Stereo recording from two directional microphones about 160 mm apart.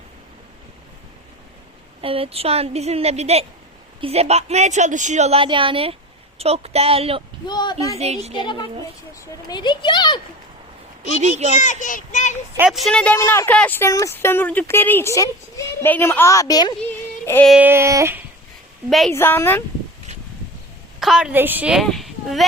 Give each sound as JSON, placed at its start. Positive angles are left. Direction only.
{"t": 2.0, "sound": "a woman's voice", "side_deg": -35}
{"t": 7.4, "sound": "speech", "side_deg": 25}
{"t": 7.9, "sound": "a woman's voice", "side_deg": -40}
{"t": 8.4, "sound": "speech", "side_deg": 30}
{"t": 11.2, "sound": "a child's voice", "side_deg": -45}
{"t": 11.5, "sound": "a child's voice", "side_deg": 50}
{"t": 12.5, "sound": "a woman's voice", "side_deg": -5}
{"t": 13.1, "sound": "speech", "side_deg": 15}
{"t": 17.6, "sound": "child singing", "side_deg": -15}
{"t": 18.9, "sound": "a woman's voice", "side_deg": 0}
{"t": 19.1, "sound": "speech", "side_deg": 15}
{"t": 21.0, "sound": "a woman's voice", "side_deg": -5}